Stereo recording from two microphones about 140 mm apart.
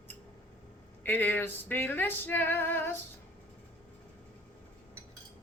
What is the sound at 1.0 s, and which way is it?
Female singing, 15° left (ahead or behind).